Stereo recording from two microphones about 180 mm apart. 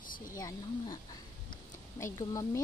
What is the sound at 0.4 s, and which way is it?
Speech, 20° left (ahead or behind).